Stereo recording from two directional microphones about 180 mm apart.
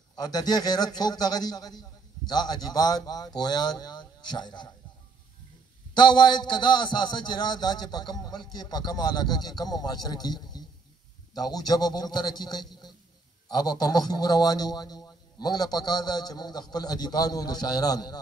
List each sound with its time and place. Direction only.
0.1 s a man's voice: 20° left (ahead or behind)
5.9 s a man's voice: 25° left (ahead or behind)